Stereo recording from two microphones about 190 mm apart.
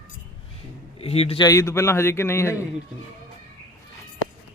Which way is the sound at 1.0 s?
30° left (ahead or behind).